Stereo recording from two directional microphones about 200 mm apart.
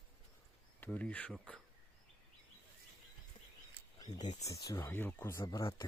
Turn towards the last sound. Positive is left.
turn(degrees=20)  # may be behind; listen again after turning